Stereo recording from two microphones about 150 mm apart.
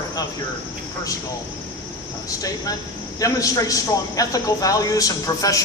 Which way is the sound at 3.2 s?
25° left (ahead or behind).